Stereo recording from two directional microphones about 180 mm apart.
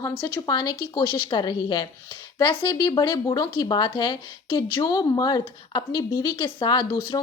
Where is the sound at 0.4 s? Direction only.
25° left (ahead or behind).